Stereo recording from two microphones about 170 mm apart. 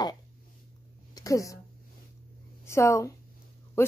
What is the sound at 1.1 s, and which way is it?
Speech, 20° left (ahead or behind).